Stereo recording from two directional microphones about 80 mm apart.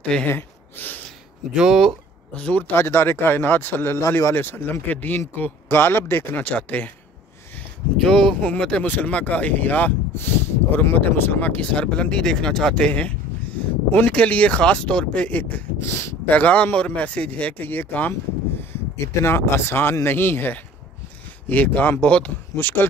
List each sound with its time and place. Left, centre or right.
0.0 s speech: centre
0.3 s gasp: left
1.5 s speech: centre
2.3 s speech: centre
2.7 s speech: left
6.4 s speech: centre
8.0 s speech: centre
19.2 s speech: left